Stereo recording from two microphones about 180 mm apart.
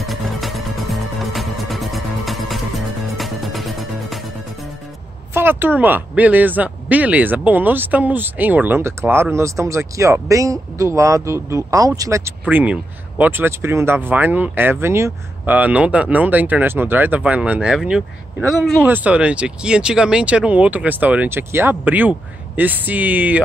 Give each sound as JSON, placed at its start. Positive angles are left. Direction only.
{"t": 0.0, "sound": "music", "side_deg": 0}
{"t": 5.3, "sound": "speech", "side_deg": -10}